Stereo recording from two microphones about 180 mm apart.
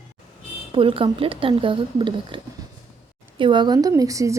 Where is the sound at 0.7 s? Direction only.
30° right (ahead or behind).